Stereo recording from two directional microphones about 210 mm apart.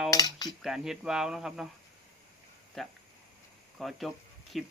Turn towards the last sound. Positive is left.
turn(degrees=0)  # may be behind; listen again after turning